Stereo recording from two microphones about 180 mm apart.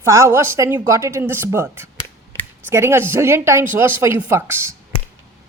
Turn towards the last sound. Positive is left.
turn(degrees=-15)  # may be behind; listen again after turning